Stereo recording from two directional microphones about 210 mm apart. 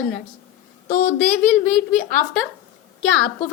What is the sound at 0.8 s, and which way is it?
Speech, 40° left (ahead or behind).